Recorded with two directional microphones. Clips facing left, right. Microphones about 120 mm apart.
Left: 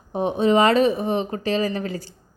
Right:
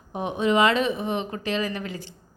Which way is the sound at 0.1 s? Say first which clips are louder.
Left 4 dB; 35° left (ahead or behind).